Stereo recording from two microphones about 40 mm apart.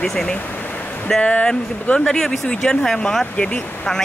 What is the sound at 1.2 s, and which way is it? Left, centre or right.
Speech, left.